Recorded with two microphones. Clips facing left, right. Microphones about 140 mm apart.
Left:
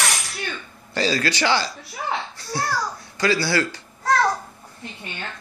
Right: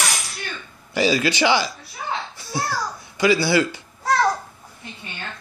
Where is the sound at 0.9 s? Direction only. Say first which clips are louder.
Right 3 dB; 15° right (ahead or behind).